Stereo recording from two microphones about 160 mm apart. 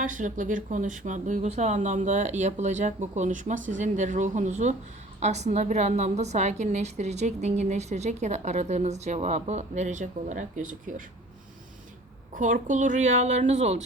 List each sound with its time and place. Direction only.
0.0 s a woman's voice: 50° right (ahead or behind)
12.3 s a woman's voice: 55° right (ahead or behind)